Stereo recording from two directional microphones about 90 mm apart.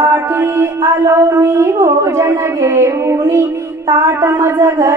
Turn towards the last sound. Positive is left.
turn(degrees=-30)  # may be behind; listen again after turning